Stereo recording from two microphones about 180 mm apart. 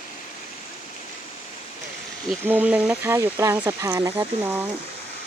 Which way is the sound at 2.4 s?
10° right (ahead or behind).